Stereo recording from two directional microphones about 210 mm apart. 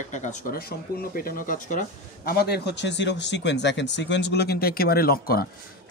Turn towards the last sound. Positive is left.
turn(degrees=45)  # may be behind; listen again after turning